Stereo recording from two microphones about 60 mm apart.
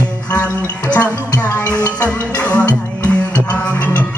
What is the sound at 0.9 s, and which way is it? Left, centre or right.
Music, left.